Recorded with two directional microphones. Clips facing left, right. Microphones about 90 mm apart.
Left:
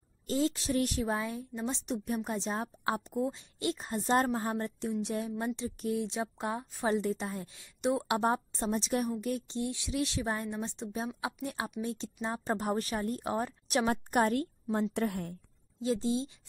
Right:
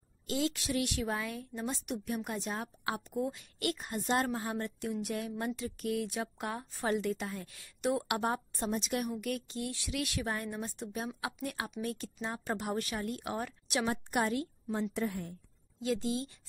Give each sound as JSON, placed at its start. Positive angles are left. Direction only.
{"t": 0.3, "sound": "speech", "side_deg": 35}
{"t": 1.0, "sound": "a woman's voice", "side_deg": 25}
{"t": 4.1, "sound": "a woman's voice", "side_deg": 35}
{"t": 6.4, "sound": "speech", "side_deg": 10}
{"t": 6.9, "sound": "a woman's voice", "side_deg": 30}
{"t": 15.0, "sound": "a woman's voice", "side_deg": 60}
{"t": 15.8, "sound": "speech", "side_deg": 30}